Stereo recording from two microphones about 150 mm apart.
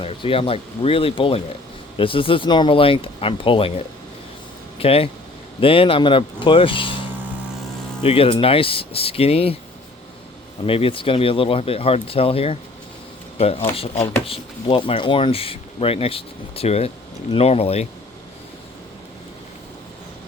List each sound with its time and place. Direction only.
0.0 s speech: 40° left (ahead or behind)
4.8 s speech: 40° left (ahead or behind)
8.0 s speech: 40° left (ahead or behind)
10.7 s speech: 40° left (ahead or behind)